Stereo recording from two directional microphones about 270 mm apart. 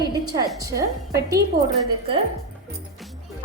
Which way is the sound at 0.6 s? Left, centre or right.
Centre.